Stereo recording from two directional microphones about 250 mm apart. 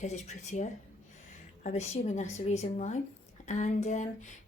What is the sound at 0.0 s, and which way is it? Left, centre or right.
Speech, left.